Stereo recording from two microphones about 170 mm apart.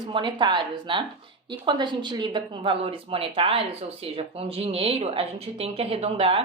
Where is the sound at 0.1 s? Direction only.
30° right (ahead or behind).